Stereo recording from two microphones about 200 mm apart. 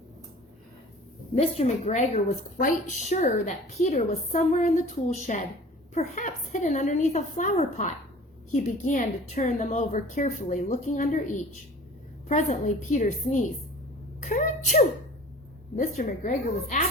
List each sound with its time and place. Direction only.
1.4 s a woman's voice: 30° left (ahead or behind)
16.0 s a woman's voice: 40° left (ahead or behind)